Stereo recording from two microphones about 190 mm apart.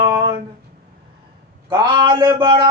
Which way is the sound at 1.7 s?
20° right (ahead or behind).